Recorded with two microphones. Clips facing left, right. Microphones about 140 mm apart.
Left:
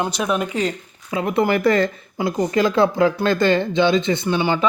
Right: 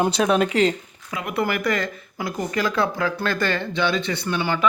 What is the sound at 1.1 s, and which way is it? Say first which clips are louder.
Speech: left 6 dB; 30° left (ahead or behind).